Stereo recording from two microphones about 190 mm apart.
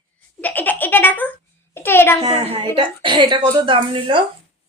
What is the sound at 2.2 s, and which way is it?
A woman's voice, 25° right (ahead or behind).